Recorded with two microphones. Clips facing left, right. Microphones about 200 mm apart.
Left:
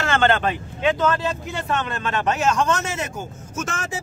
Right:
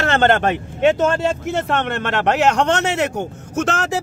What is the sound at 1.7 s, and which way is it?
Speech, 65° right (ahead or behind).